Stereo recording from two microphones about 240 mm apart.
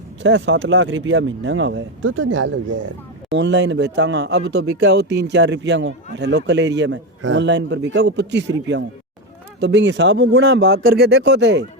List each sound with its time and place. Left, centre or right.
0.2 s a man's voice: right